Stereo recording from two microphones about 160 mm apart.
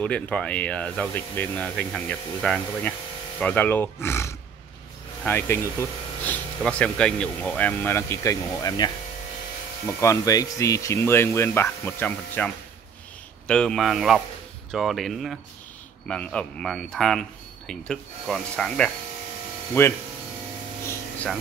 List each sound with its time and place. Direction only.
0.0 s speech: 10° left (ahead or behind)